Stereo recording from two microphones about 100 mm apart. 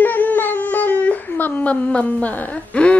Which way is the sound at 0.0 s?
15° left (ahead or behind).